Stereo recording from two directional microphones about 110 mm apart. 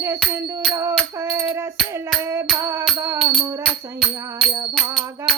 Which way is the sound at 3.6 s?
5° left (ahead or behind).